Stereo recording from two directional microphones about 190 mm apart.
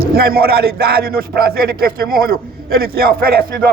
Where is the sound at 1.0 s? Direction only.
50° right (ahead or behind).